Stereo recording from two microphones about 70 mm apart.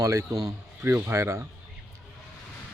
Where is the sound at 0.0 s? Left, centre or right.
Right.